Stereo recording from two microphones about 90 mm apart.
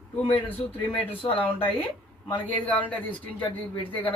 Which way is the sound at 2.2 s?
20° left (ahead or behind).